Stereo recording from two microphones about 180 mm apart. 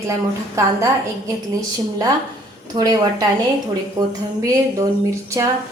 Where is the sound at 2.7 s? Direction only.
20° right (ahead or behind).